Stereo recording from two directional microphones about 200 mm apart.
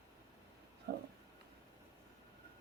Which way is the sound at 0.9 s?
50° right (ahead or behind).